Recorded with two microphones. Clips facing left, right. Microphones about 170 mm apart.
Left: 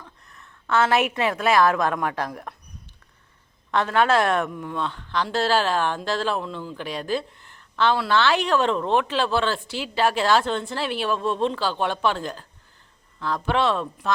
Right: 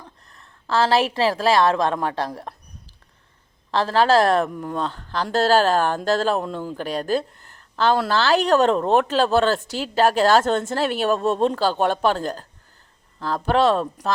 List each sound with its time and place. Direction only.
0.0 s a woman's voice: 35° right (ahead or behind)